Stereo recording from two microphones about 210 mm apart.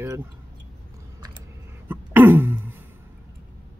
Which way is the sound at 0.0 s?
10° right (ahead or behind).